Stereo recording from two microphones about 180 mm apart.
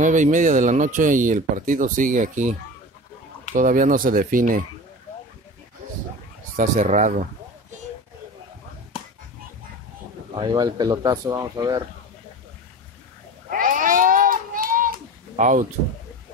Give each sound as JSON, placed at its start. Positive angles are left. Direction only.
{"t": 0.0, "sound": "speech", "side_deg": -45}
{"t": 3.5, "sound": "speech", "side_deg": -45}
{"t": 6.5, "sound": "speech", "side_deg": -40}
{"t": 10.3, "sound": "speech", "side_deg": -25}
{"t": 13.5, "sound": "a sound", "side_deg": -50}